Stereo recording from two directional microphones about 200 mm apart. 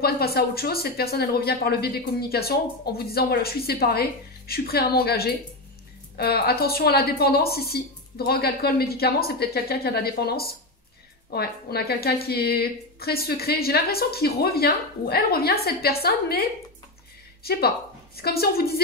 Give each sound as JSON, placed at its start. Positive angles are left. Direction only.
{"t": 0.0, "sound": "speech", "side_deg": 50}
{"t": 17.5, "sound": "speech", "side_deg": 50}